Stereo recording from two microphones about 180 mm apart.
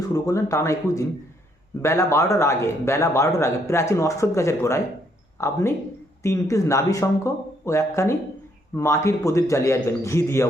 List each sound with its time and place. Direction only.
0.1 s a man's voice: 20° left (ahead or behind)